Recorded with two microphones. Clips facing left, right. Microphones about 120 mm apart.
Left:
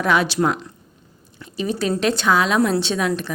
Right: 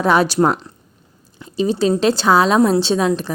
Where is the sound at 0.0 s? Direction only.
35° right (ahead or behind).